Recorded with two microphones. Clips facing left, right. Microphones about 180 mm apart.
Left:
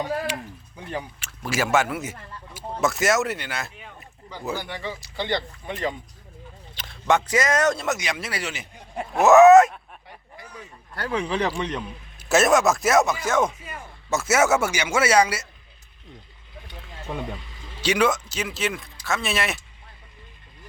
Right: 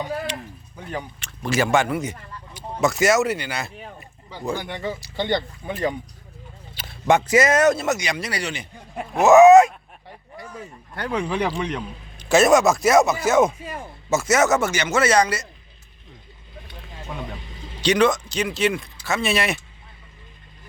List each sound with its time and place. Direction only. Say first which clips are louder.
0.3 s a sound: left 1 dB; 10° left (ahead or behind)
1.2 s speech: right 5 dB; 5° left (ahead or behind)
10.4 s speech: right 6 dB; 45° right (ahead or behind)
10.9 s speech: right 1 dB; 10° right (ahead or behind)
12.2 s a man's voice: right 3 dB; centre (ahead or behind)
17.7 s speech: right 3 dB; 5° left (ahead or behind)